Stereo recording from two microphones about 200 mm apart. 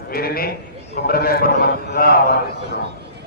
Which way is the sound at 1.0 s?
50° left (ahead or behind).